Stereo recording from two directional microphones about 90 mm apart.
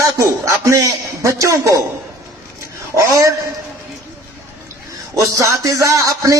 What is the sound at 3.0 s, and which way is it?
Speech, 35° right (ahead or behind).